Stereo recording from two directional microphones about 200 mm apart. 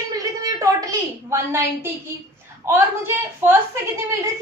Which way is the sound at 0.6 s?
15° right (ahead or behind).